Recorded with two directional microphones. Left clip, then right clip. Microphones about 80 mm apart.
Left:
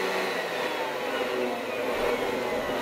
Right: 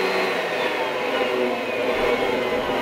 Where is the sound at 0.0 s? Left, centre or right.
Centre.